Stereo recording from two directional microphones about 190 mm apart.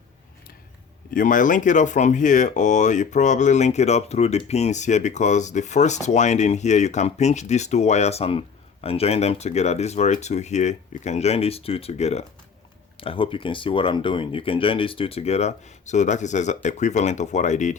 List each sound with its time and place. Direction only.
1.1 s speech: 45° left (ahead or behind)